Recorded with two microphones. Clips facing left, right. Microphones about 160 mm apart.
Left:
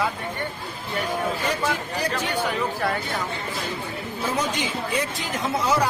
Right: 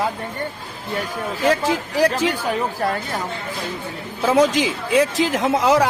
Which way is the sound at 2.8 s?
40° right (ahead or behind).